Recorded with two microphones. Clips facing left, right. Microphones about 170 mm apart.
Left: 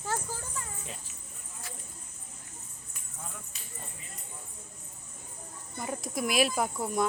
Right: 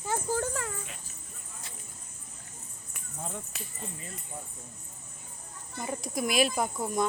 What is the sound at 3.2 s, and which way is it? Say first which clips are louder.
Speech: right 6 dB; 30° right (ahead or behind).